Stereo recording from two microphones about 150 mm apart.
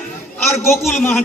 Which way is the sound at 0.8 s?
Centre (ahead or behind).